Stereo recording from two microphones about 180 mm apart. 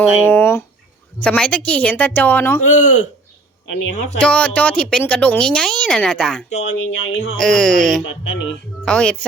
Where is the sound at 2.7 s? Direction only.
40° left (ahead or behind).